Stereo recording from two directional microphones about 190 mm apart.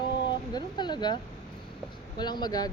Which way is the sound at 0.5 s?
25° left (ahead or behind).